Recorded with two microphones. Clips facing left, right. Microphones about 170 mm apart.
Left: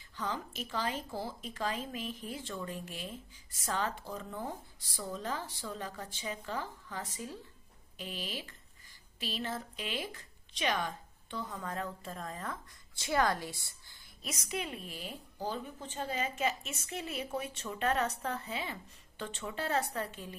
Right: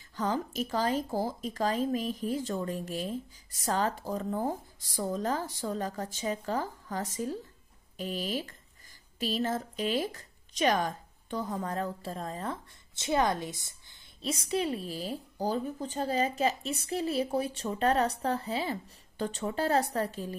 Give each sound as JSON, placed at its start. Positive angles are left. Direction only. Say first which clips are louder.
{"t": 0.1, "sound": "a woman's voice", "louder": "right 7 dB", "side_deg": -40}